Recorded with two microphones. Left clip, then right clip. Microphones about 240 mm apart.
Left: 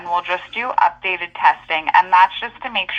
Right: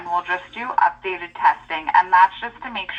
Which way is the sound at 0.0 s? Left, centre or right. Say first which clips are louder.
Left 2 dB; left.